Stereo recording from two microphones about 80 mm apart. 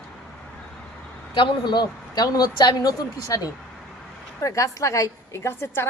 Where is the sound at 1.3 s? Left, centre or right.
Left.